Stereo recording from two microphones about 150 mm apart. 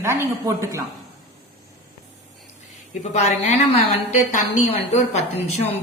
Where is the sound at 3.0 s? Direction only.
45° left (ahead or behind).